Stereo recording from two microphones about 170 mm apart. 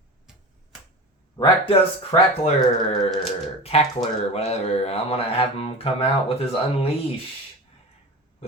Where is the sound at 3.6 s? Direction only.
35° left (ahead or behind).